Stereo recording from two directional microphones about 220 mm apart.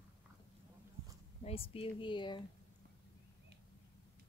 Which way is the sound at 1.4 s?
25° left (ahead or behind).